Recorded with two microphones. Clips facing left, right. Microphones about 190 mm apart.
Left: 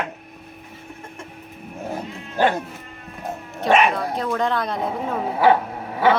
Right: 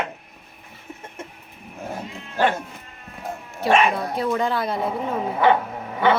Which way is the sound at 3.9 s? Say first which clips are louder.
Right 1 dB; 5° right (ahead or behind).